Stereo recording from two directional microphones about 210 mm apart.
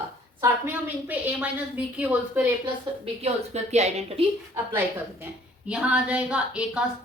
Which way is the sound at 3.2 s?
30° right (ahead or behind).